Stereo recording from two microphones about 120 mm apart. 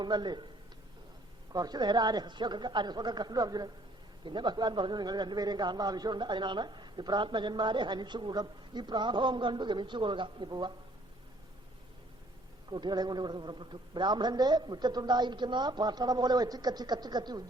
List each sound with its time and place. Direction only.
0.0 s speech: 35° right (ahead or behind)
1.5 s speech: 35° right (ahead or behind)
12.7 s speech: 35° right (ahead or behind)